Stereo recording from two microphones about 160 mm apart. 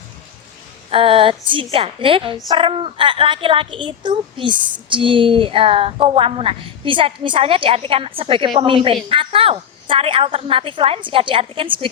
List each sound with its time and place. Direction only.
0.9 s a woman's voice: 35° right (ahead or behind)